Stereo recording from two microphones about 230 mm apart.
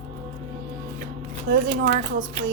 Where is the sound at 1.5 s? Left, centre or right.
Right.